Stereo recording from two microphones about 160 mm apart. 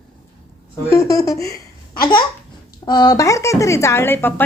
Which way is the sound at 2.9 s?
25° left (ahead or behind).